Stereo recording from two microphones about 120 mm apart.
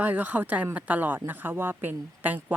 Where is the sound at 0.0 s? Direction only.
15° right (ahead or behind).